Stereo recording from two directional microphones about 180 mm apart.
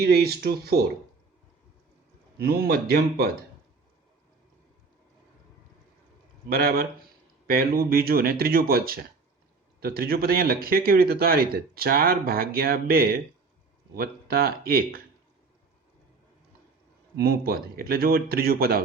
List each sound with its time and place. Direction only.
0.0 s a man's voice: 60° right (ahead or behind)
2.4 s a man's voice: 55° right (ahead or behind)
6.5 s a man's voice: 55° right (ahead or behind)
17.2 s a man's voice: 55° right (ahead or behind)